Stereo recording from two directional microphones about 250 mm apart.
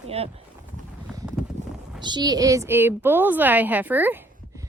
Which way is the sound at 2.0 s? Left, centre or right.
Centre.